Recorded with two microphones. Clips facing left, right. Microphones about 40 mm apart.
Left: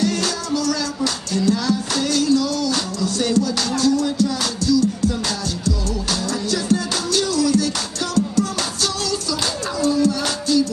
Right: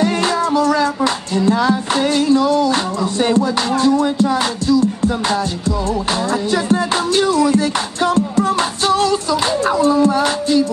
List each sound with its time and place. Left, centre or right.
0.0 s music: right